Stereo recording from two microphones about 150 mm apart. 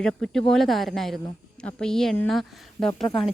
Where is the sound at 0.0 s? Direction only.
5° left (ahead or behind).